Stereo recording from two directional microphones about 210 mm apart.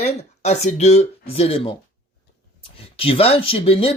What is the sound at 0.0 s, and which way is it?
A man's voice, 35° left (ahead or behind).